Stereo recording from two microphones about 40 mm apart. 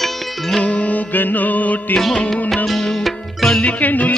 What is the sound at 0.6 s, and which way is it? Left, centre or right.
Music, left.